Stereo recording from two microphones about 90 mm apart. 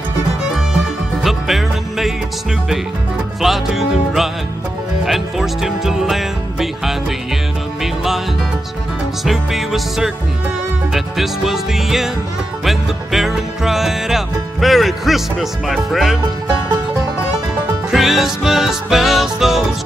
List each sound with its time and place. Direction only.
1.2 s music: centre (ahead or behind)
3.3 s music: centre (ahead or behind)
9.2 s music: centre (ahead or behind)
17.9 s music: centre (ahead or behind)